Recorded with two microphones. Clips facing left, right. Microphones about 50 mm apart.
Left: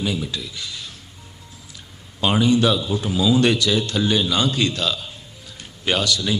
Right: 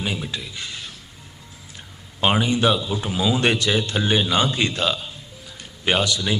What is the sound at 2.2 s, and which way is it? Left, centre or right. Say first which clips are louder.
Speech: left 1 dB; right.